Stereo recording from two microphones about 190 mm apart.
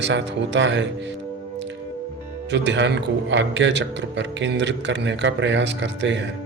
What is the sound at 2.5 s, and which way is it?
A man's voice, 70° right (ahead or behind).